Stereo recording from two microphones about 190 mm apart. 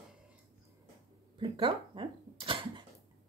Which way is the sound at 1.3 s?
25° right (ahead or behind).